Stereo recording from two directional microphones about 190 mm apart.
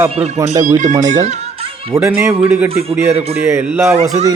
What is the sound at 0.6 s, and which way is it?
Speech, 40° right (ahead or behind).